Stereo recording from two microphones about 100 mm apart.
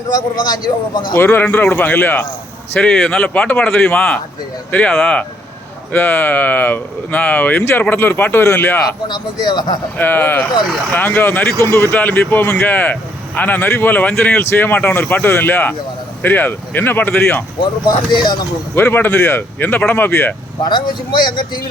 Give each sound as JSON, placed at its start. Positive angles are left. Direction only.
{"t": 0.1, "sound": "speech", "side_deg": 45}
{"t": 1.1, "sound": "speech", "side_deg": 20}
{"t": 9.0, "sound": "speech", "side_deg": 45}
{"t": 10.0, "sound": "speech", "side_deg": 20}
{"t": 17.8, "sound": "speech", "side_deg": 45}
{"t": 18.7, "sound": "speech", "side_deg": 20}
{"t": 20.6, "sound": "speech", "side_deg": 50}